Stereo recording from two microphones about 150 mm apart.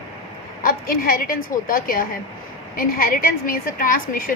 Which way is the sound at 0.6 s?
70° left (ahead or behind).